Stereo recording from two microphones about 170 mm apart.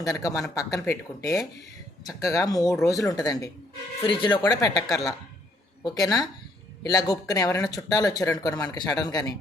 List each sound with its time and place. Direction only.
0.0 s speech: 20° left (ahead or behind)
2.9 s speech: centre (ahead or behind)
3.2 s speech: 20° left (ahead or behind)